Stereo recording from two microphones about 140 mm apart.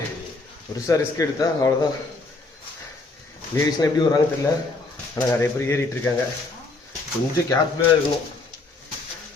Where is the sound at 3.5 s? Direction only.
25° left (ahead or behind).